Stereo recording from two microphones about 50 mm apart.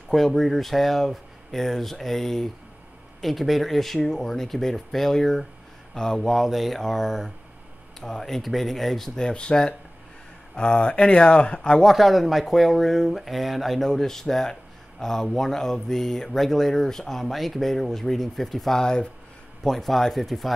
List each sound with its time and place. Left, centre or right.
0.1 s speech: centre
9.1 s speech: centre
11.8 s speech: centre